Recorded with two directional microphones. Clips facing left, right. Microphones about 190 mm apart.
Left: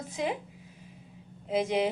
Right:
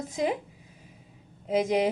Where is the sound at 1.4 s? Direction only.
40° right (ahead or behind).